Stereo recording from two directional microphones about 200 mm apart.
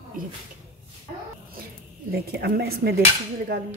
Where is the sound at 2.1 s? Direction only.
50° right (ahead or behind).